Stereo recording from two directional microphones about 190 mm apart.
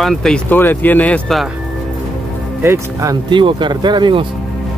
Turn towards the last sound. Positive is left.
turn(degrees=-25)  # may be behind; listen again after turning